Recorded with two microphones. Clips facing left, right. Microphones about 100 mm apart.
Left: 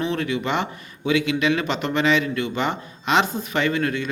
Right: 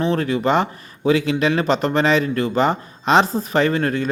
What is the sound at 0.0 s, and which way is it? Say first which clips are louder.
Speech: right 5 dB; 40° right (ahead or behind).